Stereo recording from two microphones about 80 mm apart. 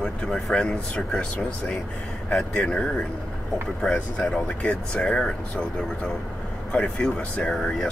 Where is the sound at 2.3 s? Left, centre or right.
Centre.